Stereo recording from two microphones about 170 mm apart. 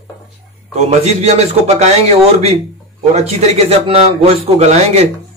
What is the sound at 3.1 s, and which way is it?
Speech, 35° right (ahead or behind).